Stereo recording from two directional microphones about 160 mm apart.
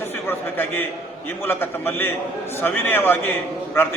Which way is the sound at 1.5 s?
10° left (ahead or behind).